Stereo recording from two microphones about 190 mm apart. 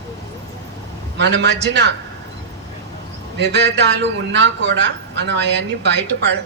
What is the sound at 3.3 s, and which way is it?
A man's voice, 65° right (ahead or behind).